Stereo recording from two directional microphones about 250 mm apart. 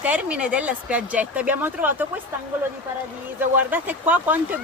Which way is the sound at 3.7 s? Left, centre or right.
Centre.